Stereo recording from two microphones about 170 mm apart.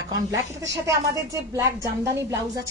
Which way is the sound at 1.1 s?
20° right (ahead or behind).